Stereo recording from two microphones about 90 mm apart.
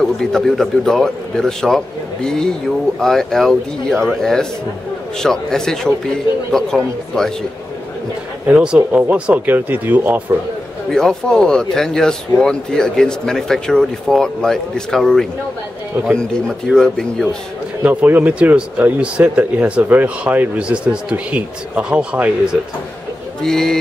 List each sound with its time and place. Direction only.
0.0 s a man's voice: 5° left (ahead or behind)
8.5 s speech: 15° right (ahead or behind)
10.9 s speech: 5° left (ahead or behind)
17.8 s speech: 20° right (ahead or behind)
23.4 s speech: 5° left (ahead or behind)